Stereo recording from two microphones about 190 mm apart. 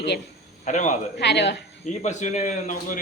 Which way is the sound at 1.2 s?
65° left (ahead or behind).